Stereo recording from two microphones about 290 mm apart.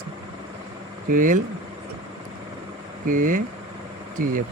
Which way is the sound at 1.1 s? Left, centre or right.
Right.